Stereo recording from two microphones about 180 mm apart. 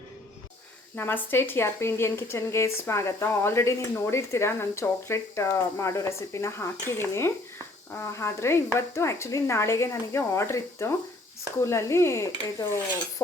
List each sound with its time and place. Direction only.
0.9 s speech: 10° left (ahead or behind)